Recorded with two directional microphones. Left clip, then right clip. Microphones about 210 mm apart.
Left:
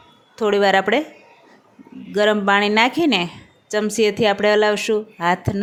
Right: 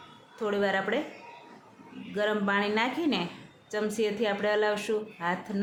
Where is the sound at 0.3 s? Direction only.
40° left (ahead or behind).